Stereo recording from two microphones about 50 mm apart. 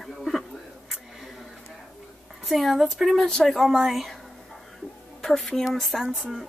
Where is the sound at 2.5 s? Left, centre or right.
Centre.